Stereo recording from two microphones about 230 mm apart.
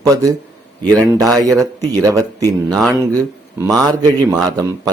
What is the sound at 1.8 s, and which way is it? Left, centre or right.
Speech, centre.